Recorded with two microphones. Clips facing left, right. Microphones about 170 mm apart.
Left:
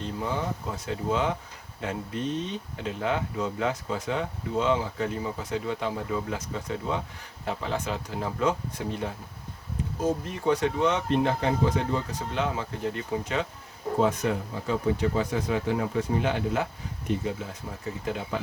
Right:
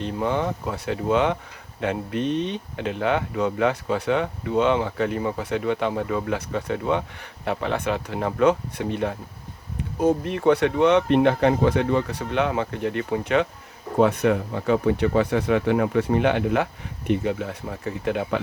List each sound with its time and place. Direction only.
0.0 s speech: 65° right (ahead or behind)